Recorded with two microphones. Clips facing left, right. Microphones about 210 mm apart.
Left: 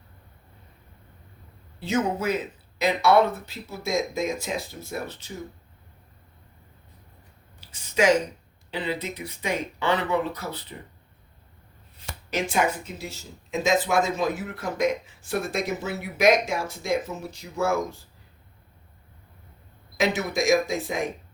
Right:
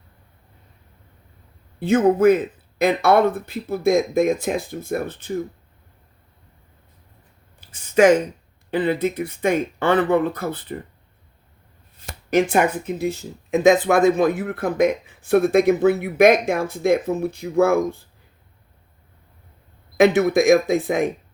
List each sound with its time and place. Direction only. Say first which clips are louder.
1.8 s speech: right 10 dB; 55° right (ahead or behind)
7.7 s speech: right 7 dB; 55° right (ahead or behind)
12.0 s speech: right 10 dB; 55° right (ahead or behind)
20.0 s speech: right 10 dB; 60° right (ahead or behind)